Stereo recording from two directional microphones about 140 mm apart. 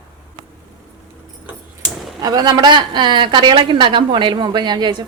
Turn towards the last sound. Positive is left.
turn(degrees=-30)  # may be behind; listen again after turning